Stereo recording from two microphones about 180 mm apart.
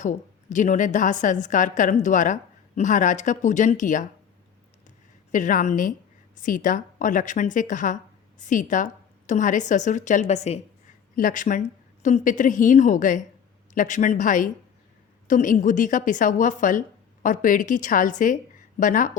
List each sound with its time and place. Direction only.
0.0 s a woman's voice: 45° left (ahead or behind)
5.3 s a woman's voice: 45° left (ahead or behind)